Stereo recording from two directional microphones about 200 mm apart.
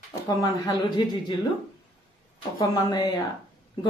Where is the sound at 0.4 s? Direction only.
20° left (ahead or behind).